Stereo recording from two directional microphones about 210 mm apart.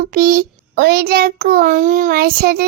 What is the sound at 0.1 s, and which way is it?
Child singing, 40° right (ahead or behind).